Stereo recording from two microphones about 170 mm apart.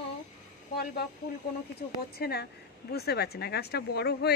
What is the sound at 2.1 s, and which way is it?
Speech, 70° left (ahead or behind).